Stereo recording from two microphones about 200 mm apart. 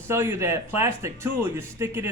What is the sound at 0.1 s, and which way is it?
Speech, 10° right (ahead or behind).